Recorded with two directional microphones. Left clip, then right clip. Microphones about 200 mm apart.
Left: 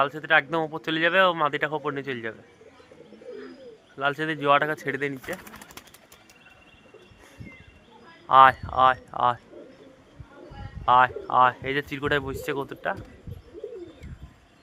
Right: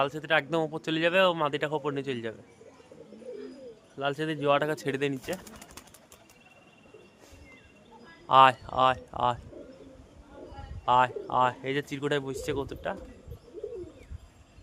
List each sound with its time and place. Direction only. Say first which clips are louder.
0.0 s speech: left 5 dB; 15° right (ahead or behind)
3.9 s speech: left 4 dB; 15° right (ahead or behind)
8.3 s speech: left 4 dB; 20° right (ahead or behind)
10.8 s speech: left 5 dB; 15° right (ahead or behind)